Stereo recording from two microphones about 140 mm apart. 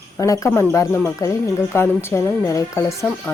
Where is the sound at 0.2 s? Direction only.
25° left (ahead or behind).